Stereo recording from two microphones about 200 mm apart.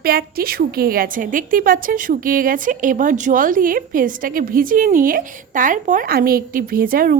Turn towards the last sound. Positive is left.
turn(degrees=-45)  # may be behind; listen again after turning